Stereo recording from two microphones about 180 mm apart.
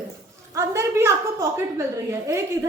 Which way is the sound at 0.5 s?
15° right (ahead or behind).